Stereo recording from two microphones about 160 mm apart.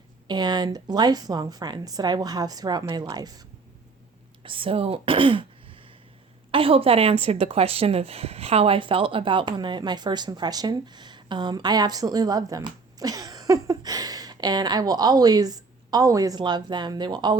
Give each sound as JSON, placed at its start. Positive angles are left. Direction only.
{"t": 0.3, "sound": "a woman's voice", "side_deg": -25}
{"t": 4.4, "sound": "a woman's voice", "side_deg": -35}